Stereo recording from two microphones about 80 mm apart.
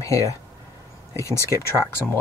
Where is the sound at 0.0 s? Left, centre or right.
Left.